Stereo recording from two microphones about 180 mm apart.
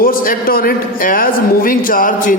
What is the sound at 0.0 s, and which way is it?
A man's voice, 50° left (ahead or behind).